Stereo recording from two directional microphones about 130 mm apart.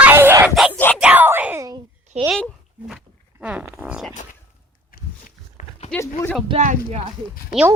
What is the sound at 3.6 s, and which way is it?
Zipper, 10° right (ahead or behind).